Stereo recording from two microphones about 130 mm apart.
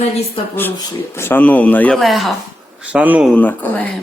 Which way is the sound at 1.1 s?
15° left (ahead or behind).